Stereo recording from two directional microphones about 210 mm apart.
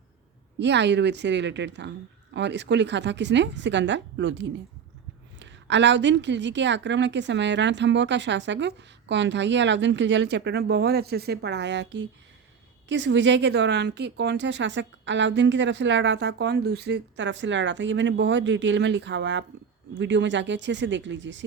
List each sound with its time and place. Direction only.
0.6 s a woman's voice: 55° right (ahead or behind)